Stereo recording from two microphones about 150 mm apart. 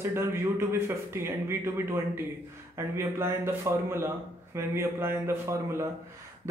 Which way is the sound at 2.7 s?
20° right (ahead or behind).